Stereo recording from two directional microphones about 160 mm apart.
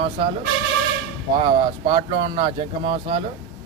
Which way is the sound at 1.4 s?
30° right (ahead or behind).